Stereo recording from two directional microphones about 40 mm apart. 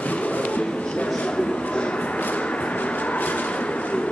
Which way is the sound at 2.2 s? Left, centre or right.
Left.